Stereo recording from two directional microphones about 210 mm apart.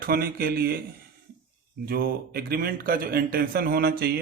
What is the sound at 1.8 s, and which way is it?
Speech, 45° right (ahead or behind).